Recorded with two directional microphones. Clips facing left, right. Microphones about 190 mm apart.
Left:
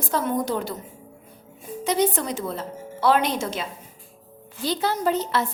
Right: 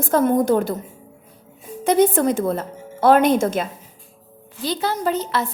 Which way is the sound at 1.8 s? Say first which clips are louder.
Right 7 dB; 50° right (ahead or behind).